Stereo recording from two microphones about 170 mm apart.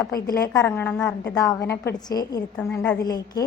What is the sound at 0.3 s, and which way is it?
A woman's voice, 20° left (ahead or behind).